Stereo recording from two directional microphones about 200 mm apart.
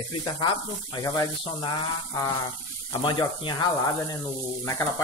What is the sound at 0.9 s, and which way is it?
Speech, 20° left (ahead or behind).